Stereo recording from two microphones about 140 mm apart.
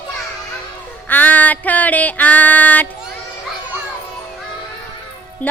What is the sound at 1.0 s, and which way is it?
Music, 10° left (ahead or behind).